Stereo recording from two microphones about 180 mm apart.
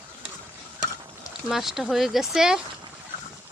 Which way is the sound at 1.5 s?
Centre (ahead or behind).